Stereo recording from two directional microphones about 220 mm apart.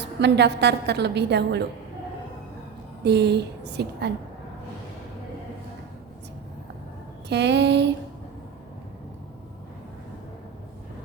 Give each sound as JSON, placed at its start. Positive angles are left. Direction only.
{"t": 0.2, "sound": "a woman's voice", "side_deg": -50}
{"t": 3.0, "sound": "a woman's voice", "side_deg": -50}
{"t": 7.3, "sound": "a woman's voice", "side_deg": -50}